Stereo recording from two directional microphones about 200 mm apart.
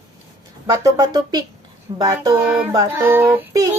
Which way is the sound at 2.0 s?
20° right (ahead or behind).